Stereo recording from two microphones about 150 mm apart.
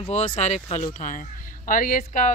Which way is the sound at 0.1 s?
50° left (ahead or behind).